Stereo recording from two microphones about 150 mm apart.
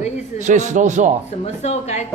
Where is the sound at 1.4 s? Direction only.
45° left (ahead or behind).